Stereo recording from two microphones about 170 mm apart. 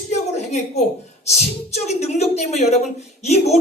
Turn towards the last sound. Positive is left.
turn(degrees=40)  # may be behind; listen again after turning